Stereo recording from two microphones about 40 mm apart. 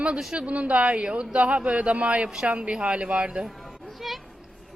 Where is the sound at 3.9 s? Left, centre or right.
Centre.